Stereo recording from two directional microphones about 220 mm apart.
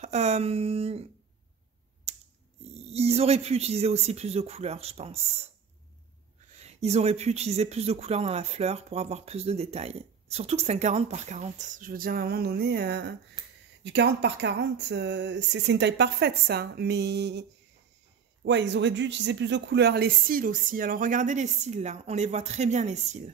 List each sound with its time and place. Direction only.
0.0 s speech: 30° right (ahead or behind)
2.1 s mechanisms: 30° right (ahead or behind)
2.8 s speech: 30° right (ahead or behind)
6.6 s speech: 30° right (ahead or behind)